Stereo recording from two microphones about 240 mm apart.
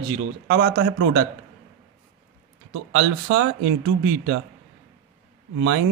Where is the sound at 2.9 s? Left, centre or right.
Right.